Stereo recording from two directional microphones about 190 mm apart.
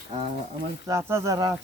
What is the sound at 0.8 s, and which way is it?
Speech, 15° right (ahead or behind).